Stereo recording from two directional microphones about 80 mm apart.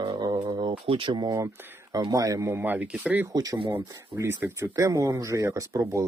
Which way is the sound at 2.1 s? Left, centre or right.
Right.